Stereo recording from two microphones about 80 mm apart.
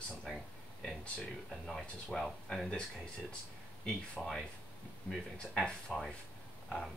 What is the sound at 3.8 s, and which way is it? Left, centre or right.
Speech, centre.